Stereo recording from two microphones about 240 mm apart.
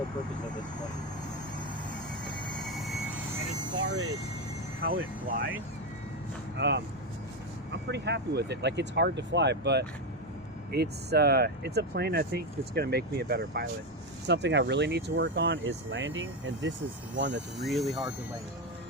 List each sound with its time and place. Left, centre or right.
2.7 s vehicle: centre
4.8 s speech: right
6.6 s speech: right
17.6 s speech: centre